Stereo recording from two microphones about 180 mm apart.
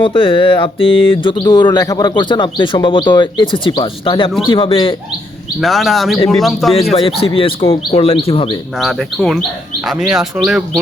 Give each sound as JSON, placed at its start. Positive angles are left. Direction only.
{"t": 0.0, "sound": "a sound", "side_deg": 30}
{"t": 5.5, "sound": "speech", "side_deg": 0}
{"t": 6.1, "sound": "a sound", "side_deg": 20}
{"t": 6.4, "sound": "speech", "side_deg": 0}
{"t": 6.9, "sound": "speech", "side_deg": 30}
{"t": 8.8, "sound": "speech", "side_deg": 0}